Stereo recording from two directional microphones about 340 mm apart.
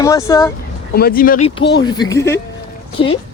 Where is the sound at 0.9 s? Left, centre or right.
Left.